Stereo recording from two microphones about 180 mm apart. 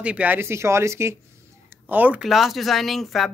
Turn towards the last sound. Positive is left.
turn(degrees=0)  # may be behind; listen again after turning